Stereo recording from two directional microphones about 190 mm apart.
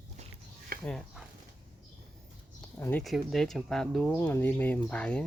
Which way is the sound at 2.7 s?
10° left (ahead or behind).